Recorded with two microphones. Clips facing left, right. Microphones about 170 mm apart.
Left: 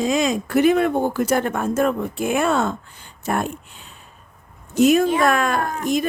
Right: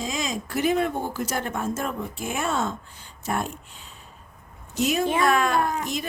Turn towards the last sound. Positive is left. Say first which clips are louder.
# left 4 dB
turn(degrees=50)  # may be behind; listen again after turning